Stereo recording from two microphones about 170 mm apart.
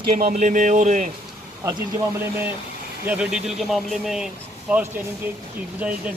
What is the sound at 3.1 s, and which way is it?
Speech, 5° right (ahead or behind).